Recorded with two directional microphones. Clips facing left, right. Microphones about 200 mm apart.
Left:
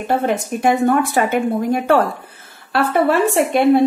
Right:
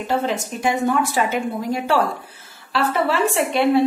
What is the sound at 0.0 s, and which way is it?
A woman's voice, 55° left (ahead or behind).